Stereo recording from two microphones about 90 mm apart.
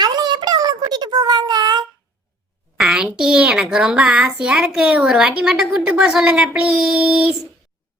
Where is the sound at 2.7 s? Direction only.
5° right (ahead or behind).